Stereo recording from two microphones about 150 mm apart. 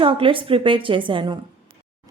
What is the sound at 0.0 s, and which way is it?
A woman's voice, 35° right (ahead or behind).